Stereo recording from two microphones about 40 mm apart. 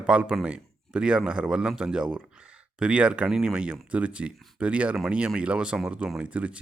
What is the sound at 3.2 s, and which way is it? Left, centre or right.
Speech, centre.